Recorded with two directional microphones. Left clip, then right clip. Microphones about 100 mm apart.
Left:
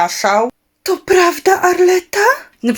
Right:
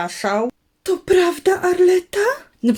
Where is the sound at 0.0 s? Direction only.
10° right (ahead or behind).